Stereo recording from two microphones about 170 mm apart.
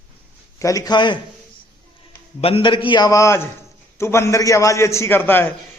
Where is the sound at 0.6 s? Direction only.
20° left (ahead or behind).